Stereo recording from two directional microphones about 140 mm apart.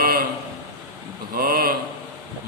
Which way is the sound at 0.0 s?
90° right.